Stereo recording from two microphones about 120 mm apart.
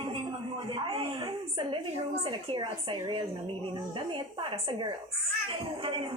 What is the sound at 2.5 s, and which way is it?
Speech, 40° right (ahead or behind).